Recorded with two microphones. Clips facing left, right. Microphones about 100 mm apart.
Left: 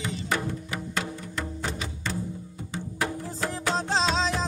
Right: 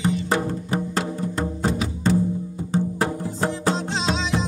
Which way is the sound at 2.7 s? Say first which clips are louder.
Right 8 dB; 35° right (ahead or behind).